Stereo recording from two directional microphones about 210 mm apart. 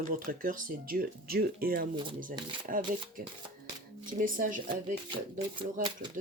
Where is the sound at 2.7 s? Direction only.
40° right (ahead or behind).